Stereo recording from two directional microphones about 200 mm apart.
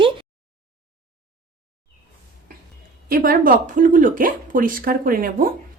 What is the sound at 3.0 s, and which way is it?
Speech, 45° right (ahead or behind).